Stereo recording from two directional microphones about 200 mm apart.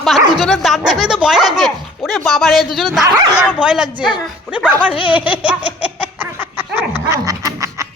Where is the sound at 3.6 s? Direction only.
5° right (ahead or behind).